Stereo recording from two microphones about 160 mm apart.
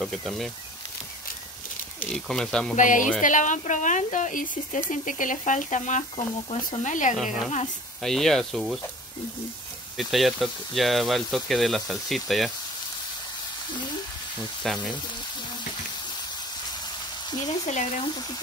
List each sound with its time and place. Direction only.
0.0 s speech: centre (ahead or behind)
2.0 s speech: 5° left (ahead or behind)
2.7 s speech: 55° left (ahead or behind); by 6.8 s 35° left (ahead or behind)
6.8 s speech: 50° left (ahead or behind)
8.0 s speech: centre (ahead or behind)
9.9 s speech: centre (ahead or behind)
14.7 s speech: centre (ahead or behind)
17.5 s speech: 45° left (ahead or behind)